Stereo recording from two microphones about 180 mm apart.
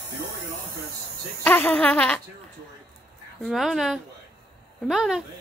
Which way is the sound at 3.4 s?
Centre (ahead or behind).